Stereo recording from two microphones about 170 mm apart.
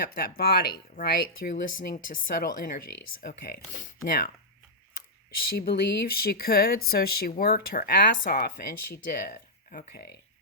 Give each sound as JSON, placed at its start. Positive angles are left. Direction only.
{"t": 0.2, "sound": "speech", "side_deg": 60}
{"t": 5.5, "sound": "speech", "side_deg": 65}